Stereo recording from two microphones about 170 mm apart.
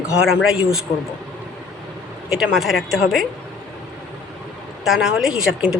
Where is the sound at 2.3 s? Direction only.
5° right (ahead or behind).